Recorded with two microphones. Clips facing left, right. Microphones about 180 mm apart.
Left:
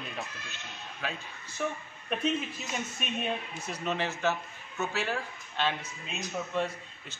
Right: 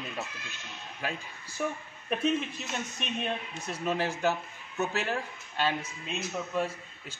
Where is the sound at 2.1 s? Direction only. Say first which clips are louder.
Right 2 dB; centre (ahead or behind).